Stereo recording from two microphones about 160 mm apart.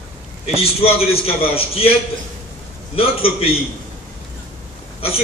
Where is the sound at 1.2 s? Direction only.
35° left (ahead or behind).